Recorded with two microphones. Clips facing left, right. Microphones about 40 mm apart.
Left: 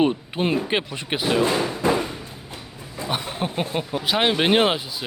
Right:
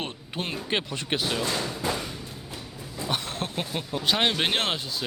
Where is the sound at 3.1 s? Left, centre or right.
Centre.